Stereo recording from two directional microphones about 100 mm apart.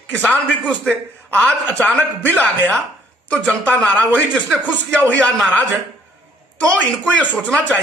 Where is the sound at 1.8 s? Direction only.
20° left (ahead or behind).